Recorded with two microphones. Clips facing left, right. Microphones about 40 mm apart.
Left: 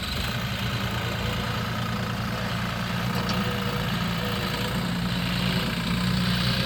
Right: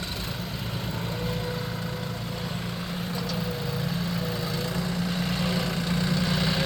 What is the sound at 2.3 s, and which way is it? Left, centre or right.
Vehicle, left.